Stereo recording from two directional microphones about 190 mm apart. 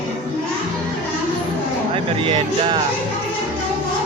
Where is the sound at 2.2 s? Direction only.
25° right (ahead or behind).